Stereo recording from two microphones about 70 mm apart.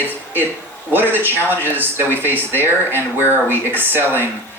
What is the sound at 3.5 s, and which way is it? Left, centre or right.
Speech, right.